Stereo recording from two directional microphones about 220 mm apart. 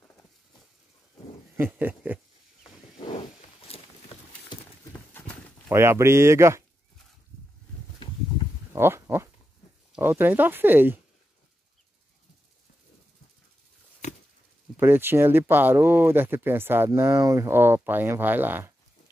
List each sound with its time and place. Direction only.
1.6 s speech: 10° right (ahead or behind)
3.1 s wild animals: 25° left (ahead or behind)
5.1 s clip-clop: 5° left (ahead or behind)
5.7 s speech: 10° right (ahead or behind)
8.7 s goat: 10° right (ahead or behind)
9.9 s speech: 10° right (ahead or behind)
14.8 s speech: 10° right (ahead or behind)